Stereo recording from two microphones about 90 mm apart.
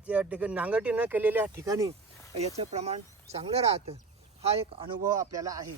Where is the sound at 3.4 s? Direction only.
90° right.